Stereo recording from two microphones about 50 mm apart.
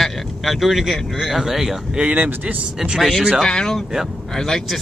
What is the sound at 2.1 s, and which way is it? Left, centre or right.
Speech, right.